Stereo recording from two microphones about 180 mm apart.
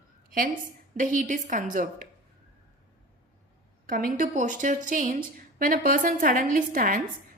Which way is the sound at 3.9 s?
50° right (ahead or behind).